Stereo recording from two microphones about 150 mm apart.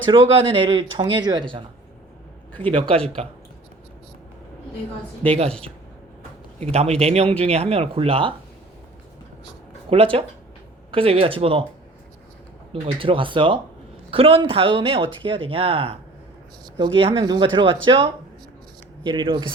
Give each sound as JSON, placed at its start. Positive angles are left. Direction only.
{"t": 0.1, "sound": "speech", "side_deg": -35}
{"t": 2.5, "sound": "a man's voice", "side_deg": 10}
{"t": 2.7, "sound": "speech", "side_deg": -35}
{"t": 5.5, "sound": "speech", "side_deg": 5}
{"t": 6.6, "sound": "a man's voice", "side_deg": -45}
{"t": 9.9, "sound": "speech", "side_deg": -40}
{"t": 12.7, "sound": "speech", "side_deg": -35}